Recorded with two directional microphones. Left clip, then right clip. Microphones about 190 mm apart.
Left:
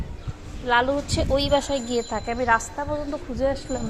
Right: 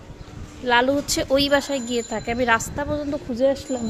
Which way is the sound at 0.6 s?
40° right (ahead or behind).